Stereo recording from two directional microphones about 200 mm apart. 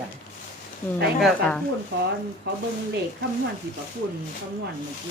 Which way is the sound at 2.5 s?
55° right (ahead or behind).